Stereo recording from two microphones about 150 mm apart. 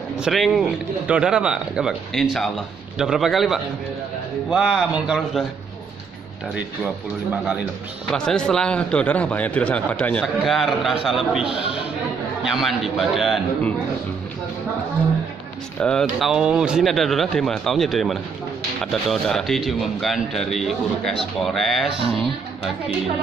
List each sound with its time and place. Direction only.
0.2 s speech: centre (ahead or behind)
8.1 s a man's voice: 5° left (ahead or behind)
12.4 s speech: centre (ahead or behind)
15.8 s speech: 5° left (ahead or behind)